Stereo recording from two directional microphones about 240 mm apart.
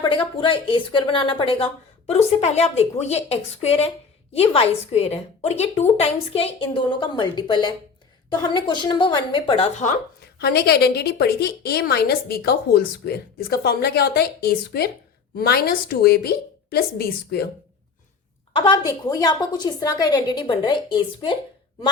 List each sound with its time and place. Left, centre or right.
0.0 s a woman's voice: left
18.5 s a woman's voice: centre